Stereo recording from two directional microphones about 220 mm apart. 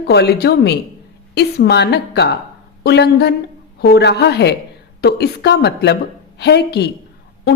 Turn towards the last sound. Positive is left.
turn(degrees=50)  # may be behind; listen again after turning